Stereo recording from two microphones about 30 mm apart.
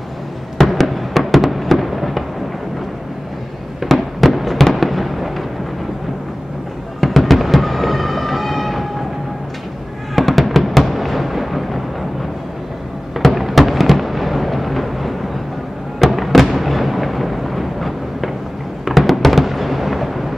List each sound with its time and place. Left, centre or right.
0.7 s fireworks: centre
3.8 s fireworks: centre
7.0 s music: centre
10.1 s fireworks: centre
13.3 s a sound: centre
16.0 s fireworks: centre